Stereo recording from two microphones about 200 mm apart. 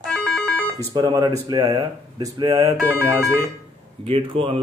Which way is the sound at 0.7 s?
20° right (ahead or behind).